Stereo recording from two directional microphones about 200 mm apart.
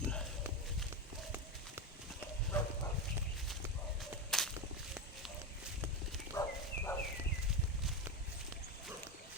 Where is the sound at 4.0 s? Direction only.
Centre (ahead or behind).